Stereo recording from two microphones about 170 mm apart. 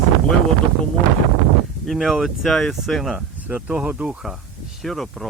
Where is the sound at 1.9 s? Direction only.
Centre (ahead or behind).